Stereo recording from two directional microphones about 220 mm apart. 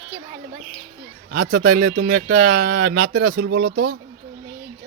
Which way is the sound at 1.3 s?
40° right (ahead or behind).